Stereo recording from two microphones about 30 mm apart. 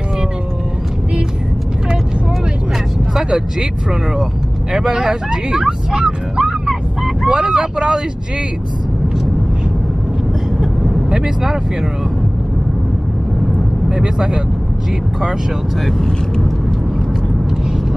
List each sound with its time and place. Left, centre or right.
3.2 s vehicle: right
4.7 s speech: centre
11.1 s speech: right
13.8 s speech: right